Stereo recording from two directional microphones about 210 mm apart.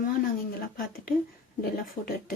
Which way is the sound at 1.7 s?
45° left (ahead or behind).